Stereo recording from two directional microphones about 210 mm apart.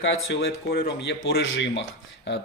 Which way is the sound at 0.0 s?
65° left (ahead or behind).